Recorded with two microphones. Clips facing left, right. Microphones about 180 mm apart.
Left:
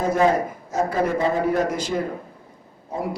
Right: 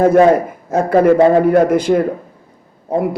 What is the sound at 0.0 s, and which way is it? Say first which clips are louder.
A man's voice: right 9 dB; 60° right (ahead or behind).